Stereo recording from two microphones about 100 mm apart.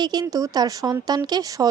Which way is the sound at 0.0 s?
45° right (ahead or behind).